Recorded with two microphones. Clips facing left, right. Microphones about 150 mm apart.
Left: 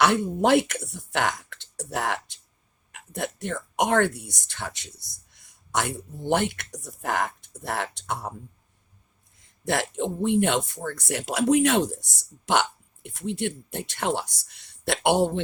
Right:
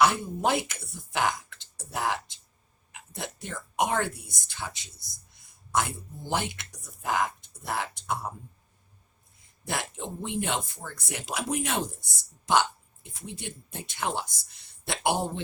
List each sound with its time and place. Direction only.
0.0 s speech: 70° left (ahead or behind)
9.6 s speech: 70° left (ahead or behind)